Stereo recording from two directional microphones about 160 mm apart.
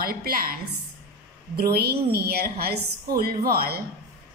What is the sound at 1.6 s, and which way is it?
A woman's voice, 80° right.